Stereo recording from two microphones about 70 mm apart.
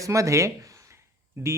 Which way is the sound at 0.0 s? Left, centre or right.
Right.